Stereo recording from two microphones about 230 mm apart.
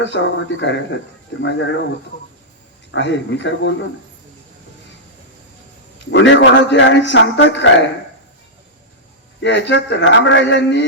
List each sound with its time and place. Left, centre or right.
0.0 s a man's voice: left
2.9 s a man's voice: left
6.1 s a man's voice: left
9.4 s a man's voice: left